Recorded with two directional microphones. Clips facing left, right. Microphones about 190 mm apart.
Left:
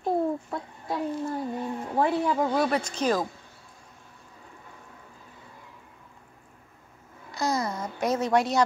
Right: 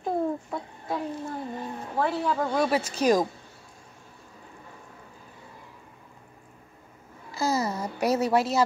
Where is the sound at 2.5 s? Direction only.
5° right (ahead or behind).